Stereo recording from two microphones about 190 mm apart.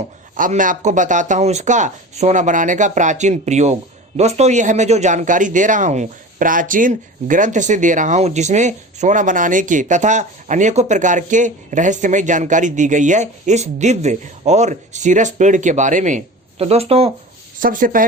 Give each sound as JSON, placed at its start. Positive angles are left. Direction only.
{"t": 0.3, "sound": "speech", "side_deg": -45}
{"t": 17.6, "sound": "speech", "side_deg": -45}